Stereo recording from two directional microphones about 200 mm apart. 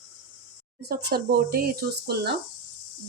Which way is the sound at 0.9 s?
55° right (ahead or behind).